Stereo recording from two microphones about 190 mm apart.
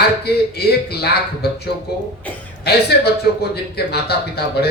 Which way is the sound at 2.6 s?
60° left (ahead or behind).